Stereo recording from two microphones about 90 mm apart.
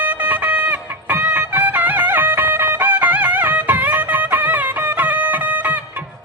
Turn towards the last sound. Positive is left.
turn(degrees=-20)  # may be behind; listen again after turning